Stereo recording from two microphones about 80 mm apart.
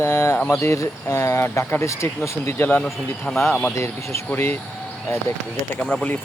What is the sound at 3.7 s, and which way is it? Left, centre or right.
Speech, left.